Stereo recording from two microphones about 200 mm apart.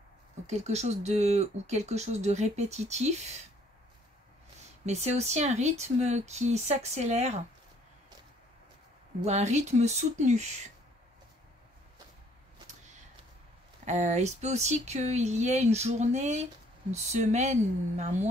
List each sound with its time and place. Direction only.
0.5 s speech: 35° right (ahead or behind)
4.8 s speech: 35° right (ahead or behind)
9.2 s speech: 35° right (ahead or behind)
13.8 s speech: 35° right (ahead or behind)